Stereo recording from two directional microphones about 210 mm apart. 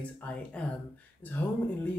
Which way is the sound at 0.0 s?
5° left (ahead or behind).